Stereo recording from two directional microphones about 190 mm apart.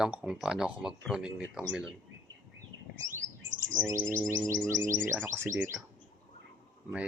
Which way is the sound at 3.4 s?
75° right (ahead or behind).